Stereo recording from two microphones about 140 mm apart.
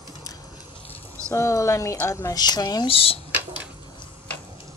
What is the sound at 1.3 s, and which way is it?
Speech, 20° left (ahead or behind).